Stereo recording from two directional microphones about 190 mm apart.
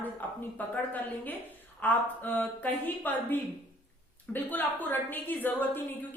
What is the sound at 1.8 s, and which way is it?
A woman's voice, 10° left (ahead or behind).